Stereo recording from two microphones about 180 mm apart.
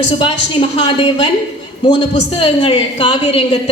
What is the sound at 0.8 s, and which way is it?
A woman's voice, 25° left (ahead or behind).